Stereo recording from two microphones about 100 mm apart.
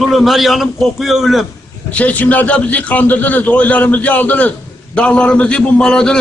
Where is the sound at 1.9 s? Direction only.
15° left (ahead or behind).